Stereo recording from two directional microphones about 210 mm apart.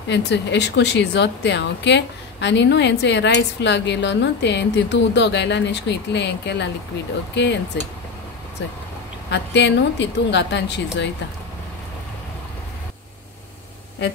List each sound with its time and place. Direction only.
0.1 s a woman's voice: 55° left (ahead or behind)
9.3 s a woman's voice: 55° left (ahead or behind)